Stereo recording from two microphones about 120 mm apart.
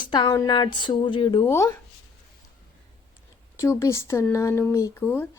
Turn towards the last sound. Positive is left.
turn(degrees=15)  # may be behind; listen again after turning